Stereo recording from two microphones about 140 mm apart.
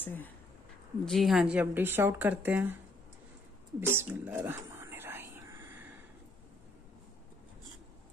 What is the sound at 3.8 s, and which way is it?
Whispering, 15° right (ahead or behind).